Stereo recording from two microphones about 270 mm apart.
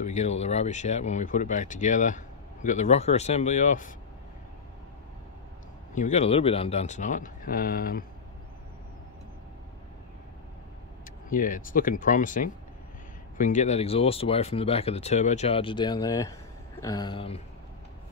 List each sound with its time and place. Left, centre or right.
0.0 s speech: left
5.9 s speech: left
11.2 s speech: left